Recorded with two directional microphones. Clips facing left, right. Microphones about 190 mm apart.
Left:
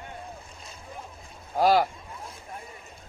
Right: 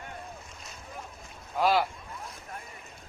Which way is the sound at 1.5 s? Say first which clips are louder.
Left 4 dB; 40° left (ahead or behind).